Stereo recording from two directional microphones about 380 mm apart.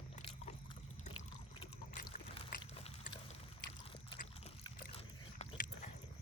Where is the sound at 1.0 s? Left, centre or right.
Centre.